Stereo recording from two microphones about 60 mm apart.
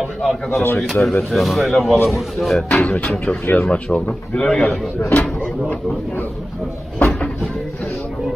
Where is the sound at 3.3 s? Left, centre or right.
Centre.